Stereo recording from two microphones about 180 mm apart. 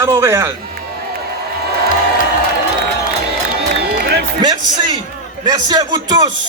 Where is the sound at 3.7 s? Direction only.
60° right (ahead or behind).